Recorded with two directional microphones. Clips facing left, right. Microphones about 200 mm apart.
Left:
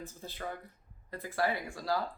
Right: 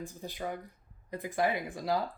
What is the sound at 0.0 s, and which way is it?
Speech, 15° right (ahead or behind).